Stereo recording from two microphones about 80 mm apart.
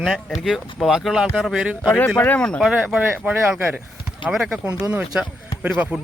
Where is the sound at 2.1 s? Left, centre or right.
Centre.